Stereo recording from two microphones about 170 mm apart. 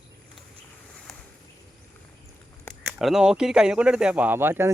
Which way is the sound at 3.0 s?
Centre (ahead or behind).